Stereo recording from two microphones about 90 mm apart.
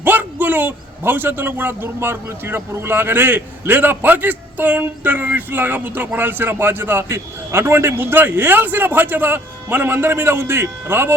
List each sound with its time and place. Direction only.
0.0 s a man's voice: 20° right (ahead or behind)